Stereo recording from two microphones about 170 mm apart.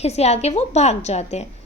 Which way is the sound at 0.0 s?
40° left (ahead or behind).